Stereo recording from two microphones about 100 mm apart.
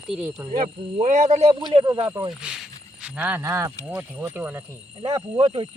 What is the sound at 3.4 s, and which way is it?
Speech, 25° right (ahead or behind).